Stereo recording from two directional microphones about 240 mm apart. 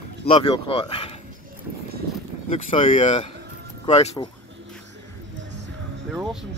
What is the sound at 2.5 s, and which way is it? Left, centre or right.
Speech, left.